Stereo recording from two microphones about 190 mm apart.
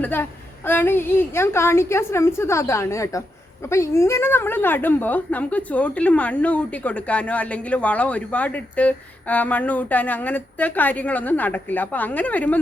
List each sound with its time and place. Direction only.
0.0 s a woman's voice: 10° left (ahead or behind)